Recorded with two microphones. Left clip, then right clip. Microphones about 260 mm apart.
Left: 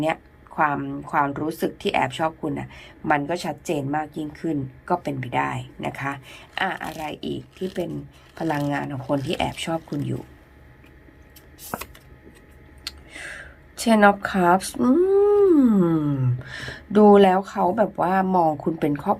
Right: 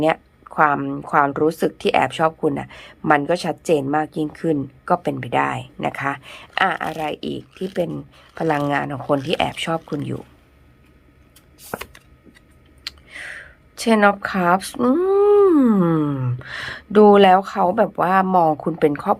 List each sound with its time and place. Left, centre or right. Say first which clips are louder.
0.0 s speech: right 6 dB; centre
11.7 s a sound: right 2 dB; centre
12.8 s speech: right 3 dB; centre